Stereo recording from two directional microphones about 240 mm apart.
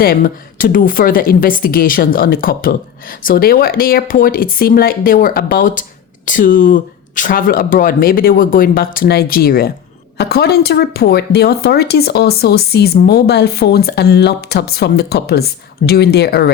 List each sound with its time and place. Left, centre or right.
0.0 s a woman's voice: left